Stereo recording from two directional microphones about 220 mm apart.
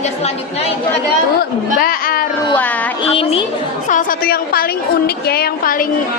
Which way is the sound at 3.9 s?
35° left (ahead or behind).